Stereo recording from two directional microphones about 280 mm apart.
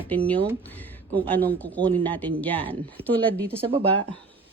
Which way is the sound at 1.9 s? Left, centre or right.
Centre.